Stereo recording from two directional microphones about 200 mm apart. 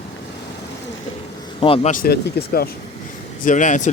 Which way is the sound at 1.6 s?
30° left (ahead or behind).